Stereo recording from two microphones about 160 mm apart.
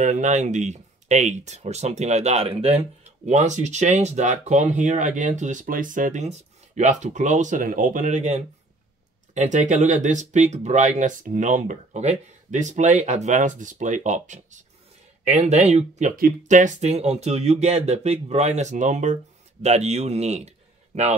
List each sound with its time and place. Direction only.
0.0 s speech: 50° right (ahead or behind)
3.3 s speech: 50° right (ahead or behind)
16.2 s a man's voice: 60° right (ahead or behind)